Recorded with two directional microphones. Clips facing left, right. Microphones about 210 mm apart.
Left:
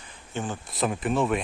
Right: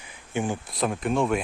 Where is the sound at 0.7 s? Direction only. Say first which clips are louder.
Right 1 dB; centre (ahead or behind).